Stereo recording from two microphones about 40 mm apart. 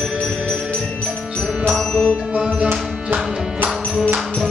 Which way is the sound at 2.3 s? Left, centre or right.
Centre.